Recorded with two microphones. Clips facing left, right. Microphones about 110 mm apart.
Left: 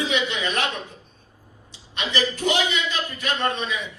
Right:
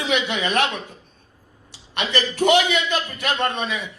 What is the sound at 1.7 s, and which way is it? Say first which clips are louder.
A man's voice: right 3 dB; 65° right (ahead or behind).